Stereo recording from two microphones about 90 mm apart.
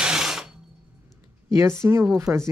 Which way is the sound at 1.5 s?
35° right (ahead or behind).